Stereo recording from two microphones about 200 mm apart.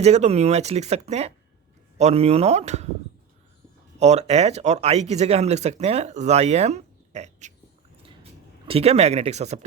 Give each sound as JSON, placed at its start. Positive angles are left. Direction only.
{"t": 0.0, "sound": "speech", "side_deg": -30}
{"t": 3.9, "sound": "speech", "side_deg": -35}
{"t": 8.0, "sound": "a sound", "side_deg": -25}